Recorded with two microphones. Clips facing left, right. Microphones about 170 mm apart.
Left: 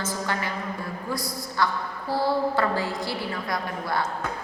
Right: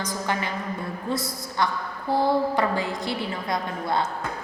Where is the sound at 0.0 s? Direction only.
20° right (ahead or behind).